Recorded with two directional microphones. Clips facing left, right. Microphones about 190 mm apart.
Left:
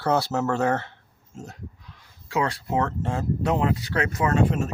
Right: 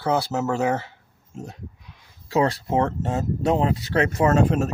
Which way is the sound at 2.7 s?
25° right (ahead or behind).